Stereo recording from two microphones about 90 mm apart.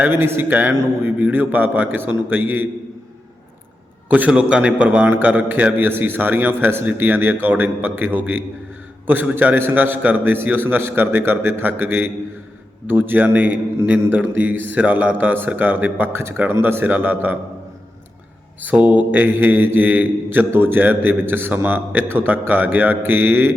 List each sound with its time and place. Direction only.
0.0 s a man's voice: 25° right (ahead or behind)
4.3 s a man's voice: 10° right (ahead or behind)
18.6 s a man's voice: 15° right (ahead or behind)